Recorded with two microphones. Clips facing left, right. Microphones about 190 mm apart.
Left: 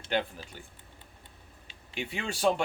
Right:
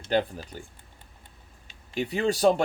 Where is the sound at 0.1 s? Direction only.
40° right (ahead or behind).